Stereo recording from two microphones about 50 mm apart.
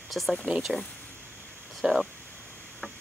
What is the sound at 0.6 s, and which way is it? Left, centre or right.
Speech, centre.